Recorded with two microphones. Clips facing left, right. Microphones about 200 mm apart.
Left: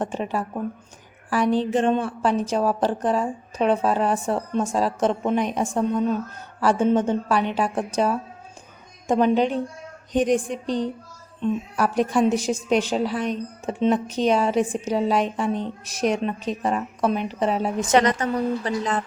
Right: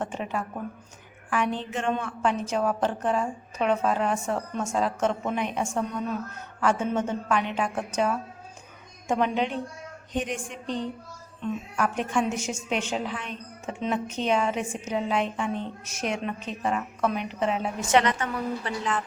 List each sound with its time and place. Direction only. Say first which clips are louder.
0.0 s a woman's voice: left 5 dB; 35° left (ahead or behind)